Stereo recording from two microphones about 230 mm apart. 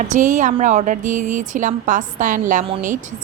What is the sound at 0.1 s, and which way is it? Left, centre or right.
Speech, right.